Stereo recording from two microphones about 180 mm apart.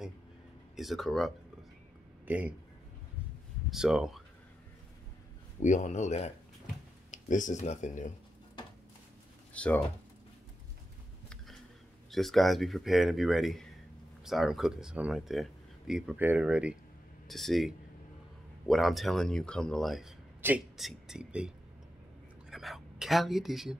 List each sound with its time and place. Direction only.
0.7 s speech: centre (ahead or behind)
3.7 s speech: 5° right (ahead or behind)
5.6 s speech: 40° left (ahead or behind)
9.5 s speech: 5° left (ahead or behind)
12.1 s speech: centre (ahead or behind)